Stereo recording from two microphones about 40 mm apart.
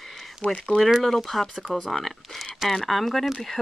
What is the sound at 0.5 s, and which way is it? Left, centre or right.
Speech, centre.